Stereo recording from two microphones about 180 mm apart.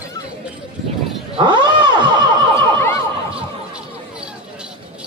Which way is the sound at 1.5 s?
25° right (ahead or behind).